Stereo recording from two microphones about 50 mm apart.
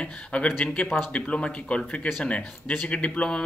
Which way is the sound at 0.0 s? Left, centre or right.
Left.